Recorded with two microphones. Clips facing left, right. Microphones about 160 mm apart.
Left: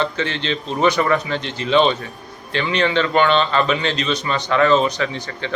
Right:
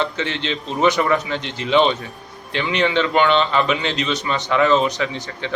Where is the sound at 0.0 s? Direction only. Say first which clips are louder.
Left 1 dB; 15° right (ahead or behind).